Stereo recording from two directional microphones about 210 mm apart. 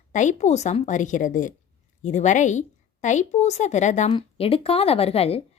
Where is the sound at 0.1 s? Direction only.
35° left (ahead or behind).